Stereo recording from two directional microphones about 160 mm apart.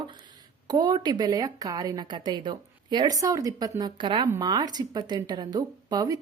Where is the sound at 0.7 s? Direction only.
25° right (ahead or behind).